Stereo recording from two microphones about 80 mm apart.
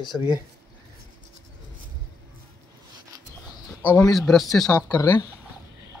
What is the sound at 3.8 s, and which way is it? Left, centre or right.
Speech, left.